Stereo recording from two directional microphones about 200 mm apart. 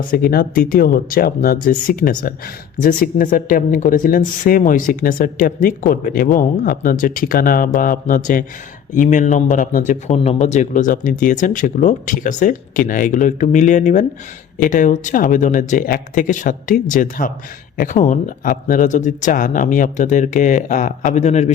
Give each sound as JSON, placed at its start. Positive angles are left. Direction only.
{"t": 0.1, "sound": "speech", "side_deg": 50}